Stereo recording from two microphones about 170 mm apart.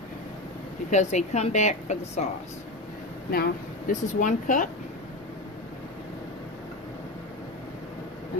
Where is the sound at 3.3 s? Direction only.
60° left (ahead or behind).